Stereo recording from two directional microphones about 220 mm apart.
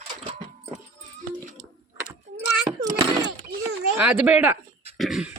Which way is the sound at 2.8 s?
20° right (ahead or behind).